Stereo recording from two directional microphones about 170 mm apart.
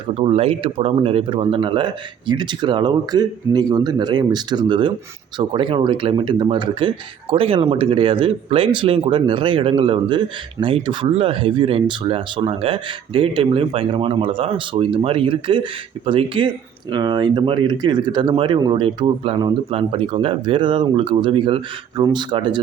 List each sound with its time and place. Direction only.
0.1 s speech: 35° right (ahead or behind)